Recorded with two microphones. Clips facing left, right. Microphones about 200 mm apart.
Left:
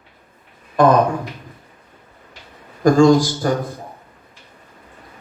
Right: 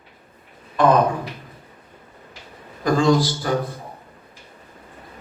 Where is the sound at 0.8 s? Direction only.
45° left (ahead or behind).